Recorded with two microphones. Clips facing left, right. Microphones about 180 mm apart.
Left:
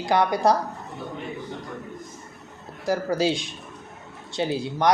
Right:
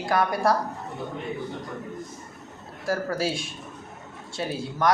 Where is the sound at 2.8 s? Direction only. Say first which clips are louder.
Left 4 dB; 20° left (ahead or behind).